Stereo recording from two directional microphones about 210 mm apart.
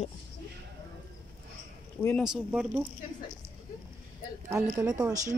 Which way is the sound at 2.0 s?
15° left (ahead or behind).